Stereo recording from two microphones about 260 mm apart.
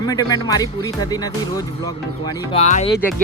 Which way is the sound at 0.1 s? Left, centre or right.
Centre.